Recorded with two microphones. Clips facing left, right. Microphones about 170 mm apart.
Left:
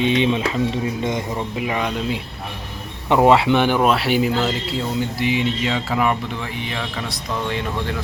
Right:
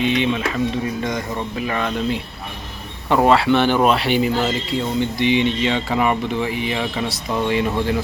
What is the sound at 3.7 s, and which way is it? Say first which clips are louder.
Speech: right 1 dB; 5° left (ahead or behind).